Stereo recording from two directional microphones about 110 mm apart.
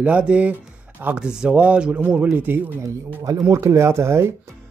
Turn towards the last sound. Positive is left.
turn(degrees=-25)  # may be behind; listen again after turning